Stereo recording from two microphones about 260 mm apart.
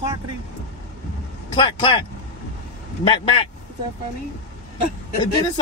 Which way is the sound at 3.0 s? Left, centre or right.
Centre.